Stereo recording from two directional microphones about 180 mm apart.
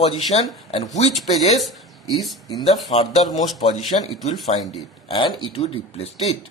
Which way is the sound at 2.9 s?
35° left (ahead or behind).